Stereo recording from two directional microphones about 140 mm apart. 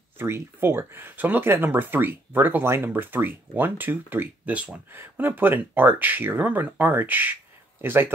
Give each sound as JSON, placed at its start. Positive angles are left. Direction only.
{"t": 0.2, "sound": "speech", "side_deg": -15}